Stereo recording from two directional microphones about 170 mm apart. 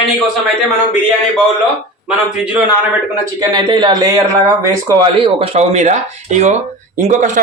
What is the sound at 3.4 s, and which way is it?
Speech, 25° right (ahead or behind).